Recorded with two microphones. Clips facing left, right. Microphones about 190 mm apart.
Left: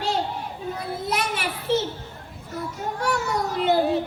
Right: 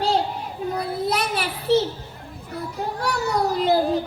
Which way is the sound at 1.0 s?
35° right (ahead or behind).